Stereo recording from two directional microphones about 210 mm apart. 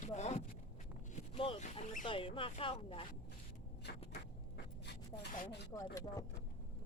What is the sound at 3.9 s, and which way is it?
Speech, 50° left (ahead or behind).